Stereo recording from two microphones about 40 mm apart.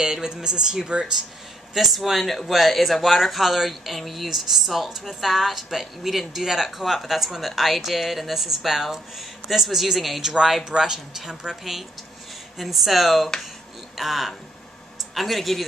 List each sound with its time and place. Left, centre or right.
0.0 s speech: centre
1.7 s a woman's voice: centre